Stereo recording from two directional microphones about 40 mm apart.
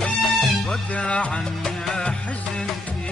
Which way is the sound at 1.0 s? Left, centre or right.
Left.